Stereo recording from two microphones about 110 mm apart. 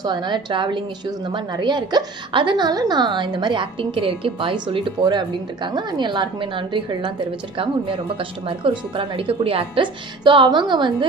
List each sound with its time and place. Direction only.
0.0 s a woman's voice: 40° right (ahead or behind)